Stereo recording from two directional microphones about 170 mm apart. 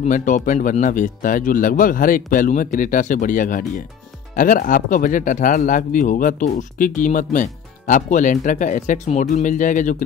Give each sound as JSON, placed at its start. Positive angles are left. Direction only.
{"t": 0.0, "sound": "speech", "side_deg": 50}